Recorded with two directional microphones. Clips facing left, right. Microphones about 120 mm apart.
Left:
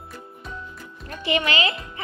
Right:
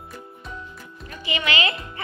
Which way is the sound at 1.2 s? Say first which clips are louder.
Left 6 dB; 55° left (ahead or behind).